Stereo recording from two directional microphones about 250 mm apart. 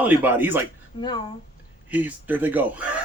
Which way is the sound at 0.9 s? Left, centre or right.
Centre.